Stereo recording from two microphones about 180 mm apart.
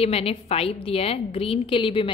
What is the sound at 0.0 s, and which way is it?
A woman's voice, 35° left (ahead or behind).